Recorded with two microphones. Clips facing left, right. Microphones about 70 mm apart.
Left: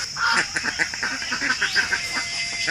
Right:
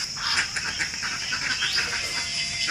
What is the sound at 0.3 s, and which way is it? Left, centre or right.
Duck, left.